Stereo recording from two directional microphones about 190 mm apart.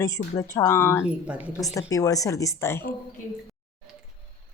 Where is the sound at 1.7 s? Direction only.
15° left (ahead or behind).